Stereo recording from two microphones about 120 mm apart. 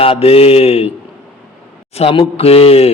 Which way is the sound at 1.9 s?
55° left (ahead or behind).